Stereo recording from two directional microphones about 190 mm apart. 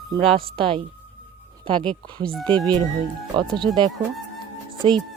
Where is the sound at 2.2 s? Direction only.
5° left (ahead or behind).